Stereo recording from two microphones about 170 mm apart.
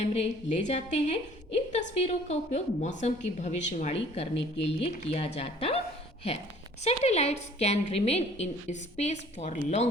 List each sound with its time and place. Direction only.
0.0 s a woman's voice: 40° left (ahead or behind)
6.8 s a woman's voice: 40° left (ahead or behind)